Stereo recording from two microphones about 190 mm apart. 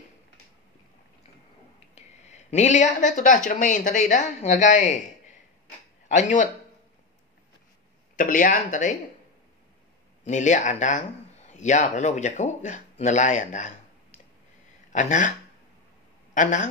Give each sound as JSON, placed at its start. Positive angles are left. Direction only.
{"t": 2.0, "sound": "speech", "side_deg": 35}
{"t": 6.0, "sound": "speech", "side_deg": 40}
{"t": 8.2, "sound": "speech", "side_deg": 45}
{"t": 10.2, "sound": "speech", "side_deg": 40}
{"t": 16.3, "sound": "a man's voice", "side_deg": 40}